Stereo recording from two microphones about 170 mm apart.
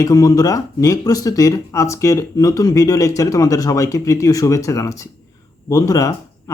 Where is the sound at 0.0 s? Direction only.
20° left (ahead or behind).